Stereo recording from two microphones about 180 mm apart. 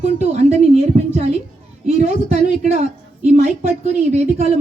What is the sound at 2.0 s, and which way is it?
Speech, 45° right (ahead or behind).